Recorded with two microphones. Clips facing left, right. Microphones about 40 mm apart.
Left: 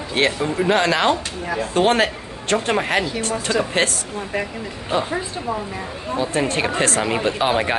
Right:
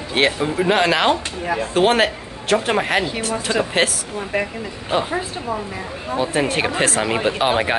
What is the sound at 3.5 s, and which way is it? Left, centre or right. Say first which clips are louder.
Speech: even; right.